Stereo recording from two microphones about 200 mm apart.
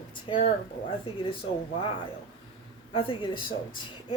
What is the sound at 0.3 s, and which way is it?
Speech, 25° left (ahead or behind).